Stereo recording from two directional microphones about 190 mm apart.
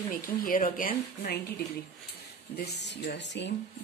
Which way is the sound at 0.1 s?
45° left (ahead or behind).